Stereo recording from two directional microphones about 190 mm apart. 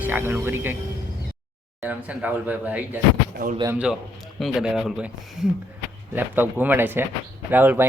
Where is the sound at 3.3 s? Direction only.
50° right (ahead or behind).